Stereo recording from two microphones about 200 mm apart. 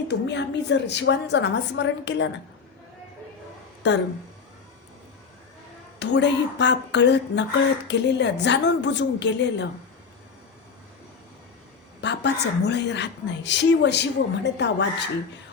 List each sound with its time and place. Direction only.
0.1 s a woman's voice: 60° left (ahead or behind)
3.8 s a woman's voice: 60° left (ahead or behind)
6.0 s a woman's voice: 60° left (ahead or behind)
12.0 s a woman's voice: 60° left (ahead or behind)